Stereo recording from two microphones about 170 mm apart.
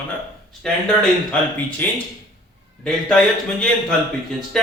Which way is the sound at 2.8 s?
5° left (ahead or behind).